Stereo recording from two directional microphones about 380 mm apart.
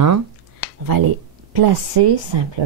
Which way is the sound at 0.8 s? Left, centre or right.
Right.